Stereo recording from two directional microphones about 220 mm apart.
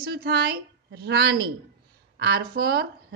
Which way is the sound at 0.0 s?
45° right (ahead or behind).